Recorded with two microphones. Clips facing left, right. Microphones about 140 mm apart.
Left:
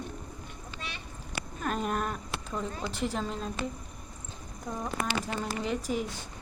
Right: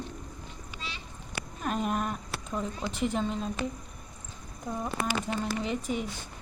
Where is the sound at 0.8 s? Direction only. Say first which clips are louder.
Even; 55° left (ahead or behind).